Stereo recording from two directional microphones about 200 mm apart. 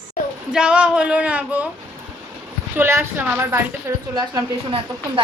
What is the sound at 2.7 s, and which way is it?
A woman's voice, 10° right (ahead or behind).